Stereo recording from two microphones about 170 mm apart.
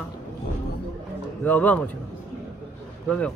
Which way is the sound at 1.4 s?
10° left (ahead or behind).